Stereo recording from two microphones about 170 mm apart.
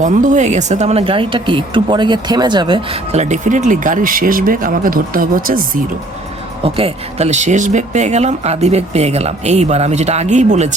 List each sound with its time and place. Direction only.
0.0 s speech: 50° right (ahead or behind)
6.6 s speech: 35° right (ahead or behind)